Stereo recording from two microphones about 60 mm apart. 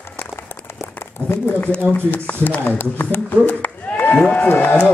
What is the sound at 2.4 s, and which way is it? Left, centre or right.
Speech, left.